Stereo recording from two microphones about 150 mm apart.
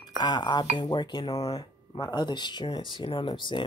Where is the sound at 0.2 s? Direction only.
30° left (ahead or behind).